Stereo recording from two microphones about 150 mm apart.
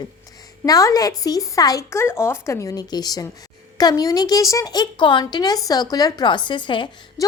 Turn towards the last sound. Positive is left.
turn(degrees=35)  # may be behind; listen again after turning